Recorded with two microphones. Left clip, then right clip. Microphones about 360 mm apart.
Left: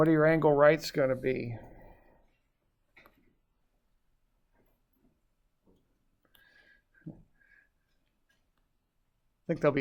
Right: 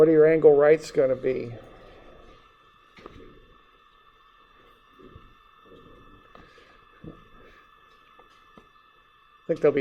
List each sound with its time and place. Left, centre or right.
0.0 s speech: left
9.5 s speech: left